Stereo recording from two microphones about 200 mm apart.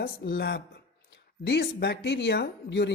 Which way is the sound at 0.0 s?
50° left (ahead or behind).